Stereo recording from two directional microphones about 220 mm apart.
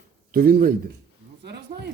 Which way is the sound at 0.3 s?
40° right (ahead or behind).